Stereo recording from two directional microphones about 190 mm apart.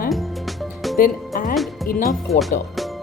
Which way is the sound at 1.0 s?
45° left (ahead or behind).